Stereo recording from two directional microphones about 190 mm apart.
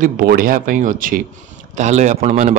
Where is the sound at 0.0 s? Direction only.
50° right (ahead or behind).